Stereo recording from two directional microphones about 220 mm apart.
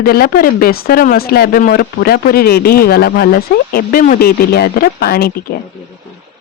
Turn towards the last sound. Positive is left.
turn(degrees=45)  # may be behind; listen again after turning